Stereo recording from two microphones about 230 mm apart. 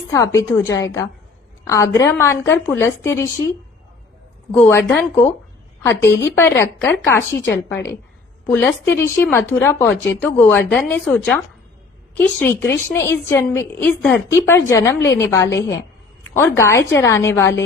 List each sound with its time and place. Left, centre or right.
0.1 s a woman's voice: centre
4.6 s a woman's voice: centre
7.2 s a woman's voice: left
7.5 s a woman's voice: centre